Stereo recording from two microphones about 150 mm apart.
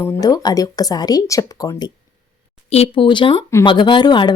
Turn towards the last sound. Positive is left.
turn(degrees=30)  # may be behind; listen again after turning